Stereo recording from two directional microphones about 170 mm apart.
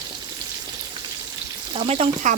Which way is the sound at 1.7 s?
35° right (ahead or behind).